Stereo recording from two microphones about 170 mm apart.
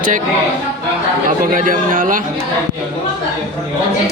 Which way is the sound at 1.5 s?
50° right (ahead or behind).